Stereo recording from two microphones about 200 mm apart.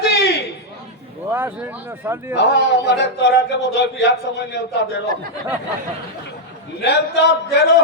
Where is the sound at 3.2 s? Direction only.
55° left (ahead or behind).